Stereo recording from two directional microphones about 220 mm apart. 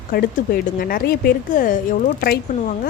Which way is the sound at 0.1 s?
45° left (ahead or behind).